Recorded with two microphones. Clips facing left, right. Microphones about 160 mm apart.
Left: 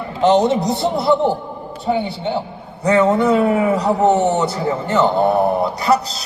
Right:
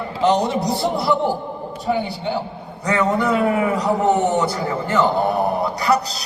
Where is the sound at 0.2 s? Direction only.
25° left (ahead or behind).